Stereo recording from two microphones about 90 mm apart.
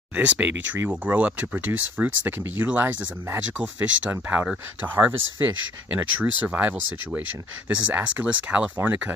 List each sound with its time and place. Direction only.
0.1 s speech: 15° right (ahead or behind)